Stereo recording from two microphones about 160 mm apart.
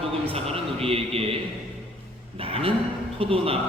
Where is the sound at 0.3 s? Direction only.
35° right (ahead or behind).